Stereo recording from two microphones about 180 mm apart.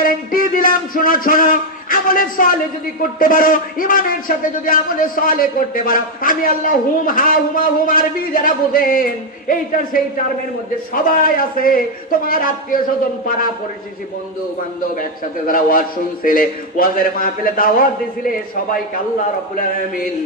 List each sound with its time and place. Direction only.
0.0 s a sound: 50° left (ahead or behind)
3.0 s a man's voice: 50° left (ahead or behind)
15.0 s a man's voice: 50° left (ahead or behind)